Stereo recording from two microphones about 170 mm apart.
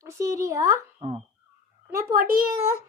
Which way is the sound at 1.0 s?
40° right (ahead or behind).